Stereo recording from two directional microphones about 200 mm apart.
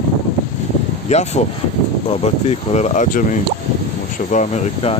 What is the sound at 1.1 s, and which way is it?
Speech, 35° left (ahead or behind).